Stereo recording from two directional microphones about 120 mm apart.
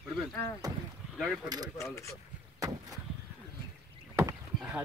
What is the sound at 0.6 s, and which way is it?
Speech, 30° right (ahead or behind).